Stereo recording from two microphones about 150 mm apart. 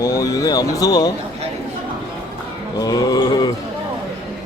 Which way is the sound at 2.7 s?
25° left (ahead or behind).